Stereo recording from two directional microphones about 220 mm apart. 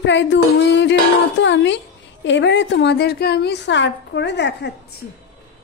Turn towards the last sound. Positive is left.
turn(degrees=50)  # may be behind; listen again after turning